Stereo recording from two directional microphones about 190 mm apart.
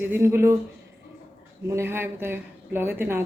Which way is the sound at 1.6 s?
15° right (ahead or behind).